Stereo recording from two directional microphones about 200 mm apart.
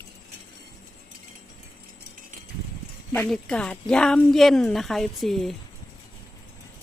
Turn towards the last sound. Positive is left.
turn(degrees=0)  # may be behind; listen again after turning